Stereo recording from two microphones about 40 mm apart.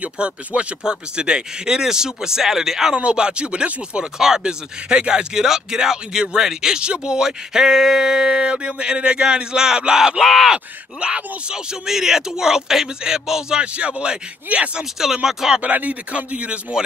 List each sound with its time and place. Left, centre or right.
0.0 s speech: right; by 2.9 s centre
3.0 s speech: right
10.2 s speech: centre
10.5 s speech: right
11.5 s speech: centre
13.7 s speech: right
14.8 s speech: centre
15.6 s speech: right